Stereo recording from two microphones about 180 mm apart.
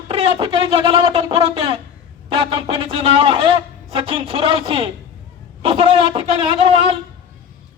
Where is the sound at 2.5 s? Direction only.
30° right (ahead or behind).